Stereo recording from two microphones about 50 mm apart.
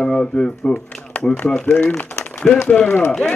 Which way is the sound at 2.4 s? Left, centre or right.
Left.